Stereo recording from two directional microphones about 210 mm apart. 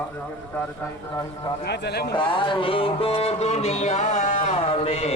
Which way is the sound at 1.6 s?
50° left (ahead or behind).